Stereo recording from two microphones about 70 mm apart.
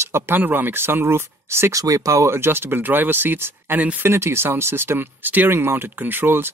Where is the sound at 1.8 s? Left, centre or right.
Right.